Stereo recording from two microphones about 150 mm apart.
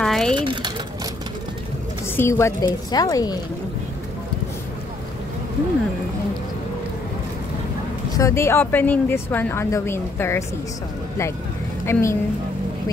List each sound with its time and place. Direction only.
0.0 s a sound: 5° left (ahead or behind)
0.4 s sewing machine: 30° right (ahead or behind)
2.1 s a woman's voice: 20° left (ahead or behind)
8.2 s a woman's voice: 20° left (ahead or behind)
11.8 s a woman's voice: 15° left (ahead or behind)